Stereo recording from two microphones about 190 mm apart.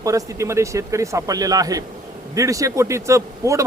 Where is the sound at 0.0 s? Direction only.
15° right (ahead or behind).